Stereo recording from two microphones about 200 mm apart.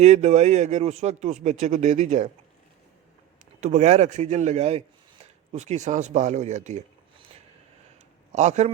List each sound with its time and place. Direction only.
0.0 s a man's voice: 35° right (ahead or behind)
3.6 s a man's voice: 35° right (ahead or behind)
8.3 s a man's voice: 35° right (ahead or behind)